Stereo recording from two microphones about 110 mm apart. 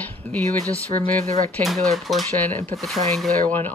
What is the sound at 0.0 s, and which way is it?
Speech, 15° left (ahead or behind).